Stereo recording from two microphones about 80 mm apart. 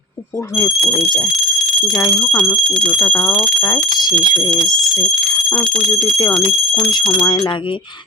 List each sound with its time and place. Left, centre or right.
1.9 s speech: left
2.2 s speech: centre
3.9 s speech: left
6.0 s speech: left